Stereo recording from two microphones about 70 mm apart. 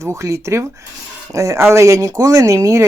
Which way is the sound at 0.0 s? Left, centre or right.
Right.